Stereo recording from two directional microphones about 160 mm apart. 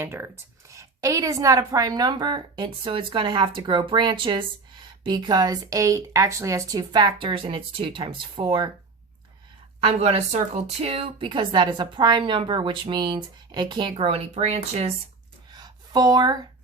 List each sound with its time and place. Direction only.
0.0 s a woman's voice: 15° right (ahead or behind)
9.8 s a woman's voice: 40° right (ahead or behind)
13.9 s speech: 40° right (ahead or behind)
15.4 s a sound: 25° right (ahead or behind)